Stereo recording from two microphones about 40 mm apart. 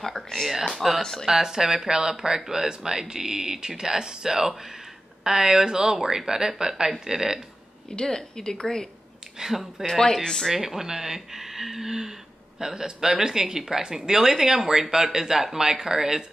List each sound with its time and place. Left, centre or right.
0.0 s a woman's voice: centre
1.2 s speech: centre
8.0 s a woman's voice: centre
9.4 s speech: centre
9.8 s a woman's voice: centre
10.5 s speech: centre